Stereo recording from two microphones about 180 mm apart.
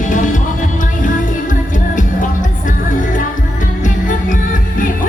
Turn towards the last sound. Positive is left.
turn(degrees=45)  # may be behind; listen again after turning